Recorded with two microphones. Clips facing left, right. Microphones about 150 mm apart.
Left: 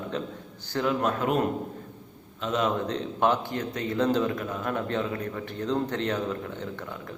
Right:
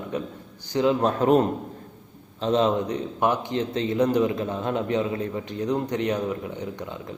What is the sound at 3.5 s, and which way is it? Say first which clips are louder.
Speech: right 5 dB; 25° right (ahead or behind).